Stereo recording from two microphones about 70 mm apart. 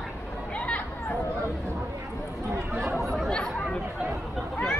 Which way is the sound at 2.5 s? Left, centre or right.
Right.